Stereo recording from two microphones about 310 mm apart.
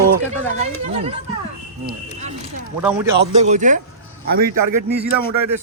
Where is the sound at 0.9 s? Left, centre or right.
Right.